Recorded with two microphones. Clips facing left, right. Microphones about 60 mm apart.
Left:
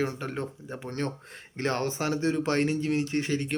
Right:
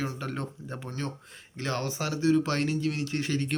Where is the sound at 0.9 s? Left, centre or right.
Left.